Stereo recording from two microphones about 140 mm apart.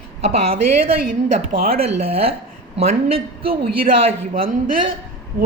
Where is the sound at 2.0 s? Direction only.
45° right (ahead or behind).